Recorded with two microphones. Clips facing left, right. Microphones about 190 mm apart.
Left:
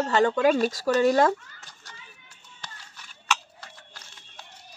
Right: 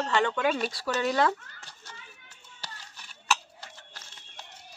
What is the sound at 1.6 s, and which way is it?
Children playing, 30° right (ahead or behind).